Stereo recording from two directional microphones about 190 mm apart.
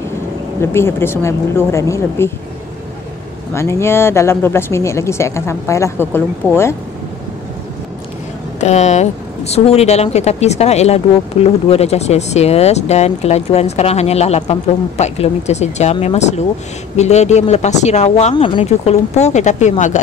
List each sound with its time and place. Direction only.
0.6 s speech: 15° left (ahead or behind)
3.5 s speech: 15° left (ahead or behind)
8.5 s speech: 35° left (ahead or behind)